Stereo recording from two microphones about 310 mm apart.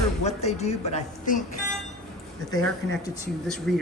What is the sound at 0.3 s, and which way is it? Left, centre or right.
Speech, left.